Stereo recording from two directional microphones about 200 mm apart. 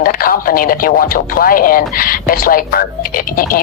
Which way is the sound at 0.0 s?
45° left (ahead or behind).